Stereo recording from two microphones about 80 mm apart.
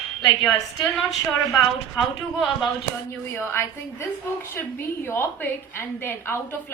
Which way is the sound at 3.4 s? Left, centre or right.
Left.